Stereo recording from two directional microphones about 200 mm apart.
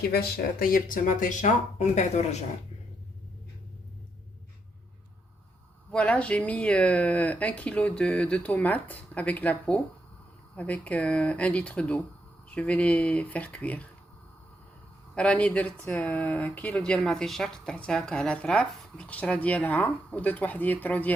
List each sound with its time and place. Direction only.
0.1 s speech: 50° left (ahead or behind)
5.9 s speech: 5° left (ahead or behind)
15.1 s speech: 5° left (ahead or behind)